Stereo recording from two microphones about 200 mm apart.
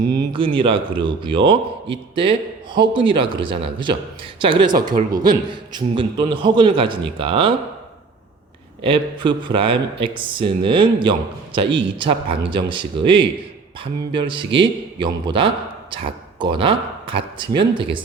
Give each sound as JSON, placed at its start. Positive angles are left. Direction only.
{"t": 0.1, "sound": "a man's voice", "side_deg": -25}
{"t": 8.8, "sound": "a man's voice", "side_deg": -25}